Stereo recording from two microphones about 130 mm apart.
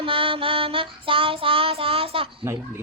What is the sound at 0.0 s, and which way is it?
Child singing, 45° right (ahead or behind).